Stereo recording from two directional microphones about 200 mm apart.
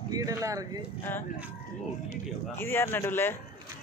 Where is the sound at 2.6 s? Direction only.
10° left (ahead or behind).